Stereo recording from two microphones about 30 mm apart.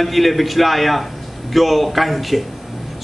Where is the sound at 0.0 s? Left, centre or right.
Centre.